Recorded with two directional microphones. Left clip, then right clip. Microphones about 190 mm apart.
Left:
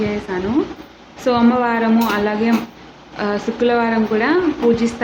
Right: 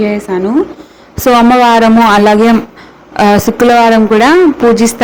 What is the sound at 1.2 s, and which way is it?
Speech, 50° right (ahead or behind).